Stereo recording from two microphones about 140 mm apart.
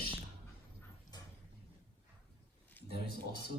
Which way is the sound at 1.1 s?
30° left (ahead or behind).